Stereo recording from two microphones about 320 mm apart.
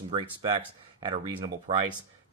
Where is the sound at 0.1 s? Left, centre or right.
Centre.